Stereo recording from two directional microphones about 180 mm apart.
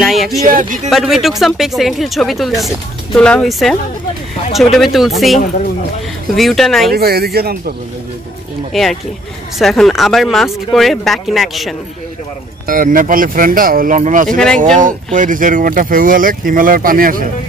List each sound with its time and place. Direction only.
0.0 s a sound: centre (ahead or behind)
0.5 s speech: 45° right (ahead or behind)
0.8 s speech: centre (ahead or behind)
6.9 s speech: 60° right (ahead or behind)
8.7 s speech: centre (ahead or behind)
12.6 s speech: 50° right (ahead or behind)